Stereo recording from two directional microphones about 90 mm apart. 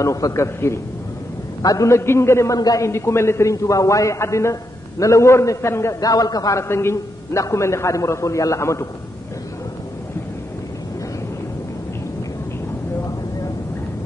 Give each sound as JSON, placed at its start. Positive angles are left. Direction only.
{"t": 0.0, "sound": "a man's voice", "side_deg": 35}
{"t": 2.9, "sound": "a man's voice", "side_deg": 30}
{"t": 5.9, "sound": "a man's voice", "side_deg": 45}
{"t": 6.7, "sound": "a man's voice", "side_deg": 30}